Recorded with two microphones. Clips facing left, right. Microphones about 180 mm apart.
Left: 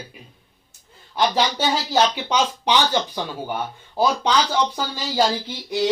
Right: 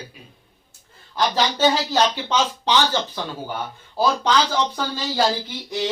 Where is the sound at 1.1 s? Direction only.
15° left (ahead or behind).